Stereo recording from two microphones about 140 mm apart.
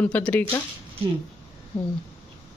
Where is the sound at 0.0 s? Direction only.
10° left (ahead or behind).